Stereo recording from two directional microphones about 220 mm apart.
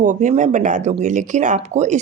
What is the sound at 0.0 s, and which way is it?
Speech, 35° right (ahead or behind).